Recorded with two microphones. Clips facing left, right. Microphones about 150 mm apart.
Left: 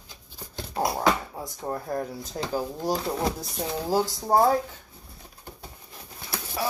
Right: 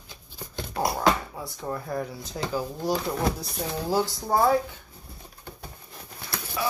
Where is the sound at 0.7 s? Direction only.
35° left (ahead or behind).